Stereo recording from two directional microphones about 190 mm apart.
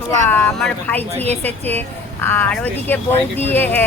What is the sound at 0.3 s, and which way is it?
Speech, 10° left (ahead or behind).